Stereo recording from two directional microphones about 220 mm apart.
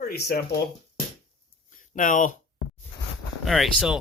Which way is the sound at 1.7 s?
35° left (ahead or behind).